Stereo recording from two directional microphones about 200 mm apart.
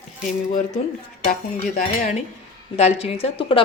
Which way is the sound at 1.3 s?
40° left (ahead or behind).